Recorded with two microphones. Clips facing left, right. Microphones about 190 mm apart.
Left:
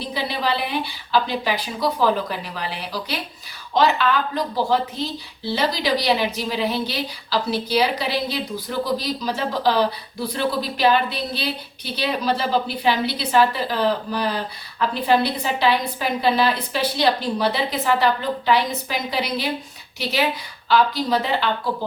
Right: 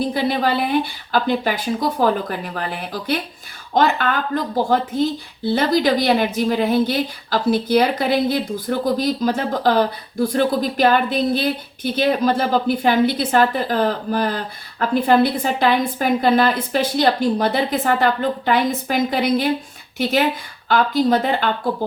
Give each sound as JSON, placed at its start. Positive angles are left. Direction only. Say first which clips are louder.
{"t": 0.0, "sound": "a woman's voice", "louder": "right 6 dB", "side_deg": -50}